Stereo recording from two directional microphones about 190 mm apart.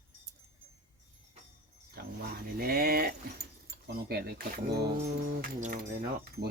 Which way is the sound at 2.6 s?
50° right (ahead or behind).